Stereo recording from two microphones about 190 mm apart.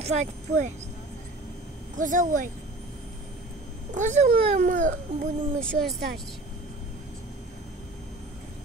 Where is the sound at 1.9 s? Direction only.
45° right (ahead or behind).